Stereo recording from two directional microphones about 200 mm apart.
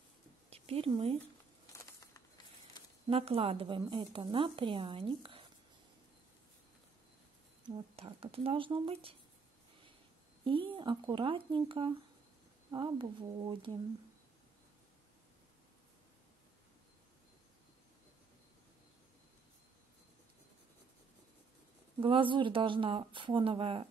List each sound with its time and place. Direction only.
0.5 s speech: 30° right (ahead or behind)
1.7 s a sound: 15° left (ahead or behind)
3.1 s a woman's voice: 30° right (ahead or behind)
7.7 s a woman's voice: 30° right (ahead or behind)
10.4 s a woman's voice: 25° right (ahead or behind)
22.0 s a woman's voice: 25° right (ahead or behind)